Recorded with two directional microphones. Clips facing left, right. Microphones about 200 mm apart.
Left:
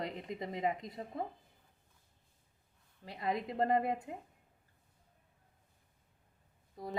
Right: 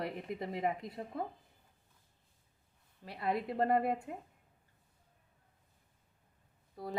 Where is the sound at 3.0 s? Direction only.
20° left (ahead or behind).